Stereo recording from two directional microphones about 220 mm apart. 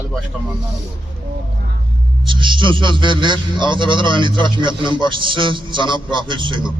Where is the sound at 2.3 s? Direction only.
20° right (ahead or behind).